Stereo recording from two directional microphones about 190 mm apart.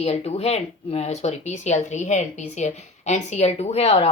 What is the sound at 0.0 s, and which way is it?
Speech, 35° left (ahead or behind).